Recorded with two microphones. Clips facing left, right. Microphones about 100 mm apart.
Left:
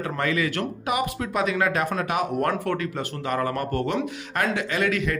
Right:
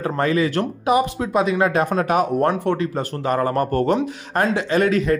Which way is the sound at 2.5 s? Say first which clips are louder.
Right 5 dB; 25° right (ahead or behind).